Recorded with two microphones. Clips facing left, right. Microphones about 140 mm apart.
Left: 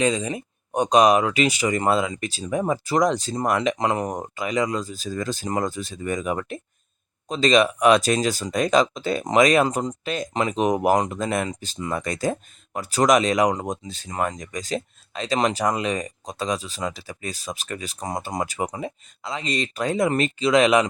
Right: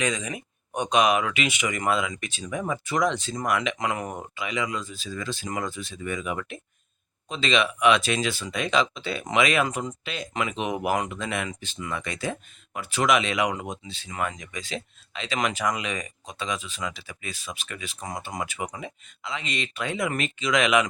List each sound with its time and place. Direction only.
0.0 s speech: 30° left (ahead or behind)